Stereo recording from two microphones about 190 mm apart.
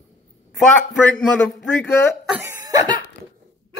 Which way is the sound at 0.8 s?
5° left (ahead or behind).